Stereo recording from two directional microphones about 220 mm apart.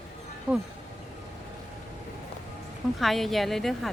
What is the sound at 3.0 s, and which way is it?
Speech, centre (ahead or behind).